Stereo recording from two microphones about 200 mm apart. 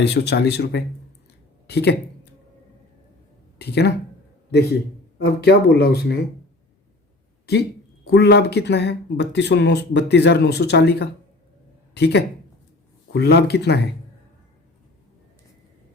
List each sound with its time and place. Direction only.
0.0 s speech: 55° left (ahead or behind)
3.6 s speech: 55° left (ahead or behind)
5.2 s speech: 55° left (ahead or behind)
8.1 s speech: 55° left (ahead or behind)